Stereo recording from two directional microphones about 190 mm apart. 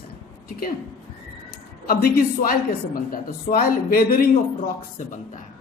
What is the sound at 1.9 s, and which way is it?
Speech, 50° left (ahead or behind).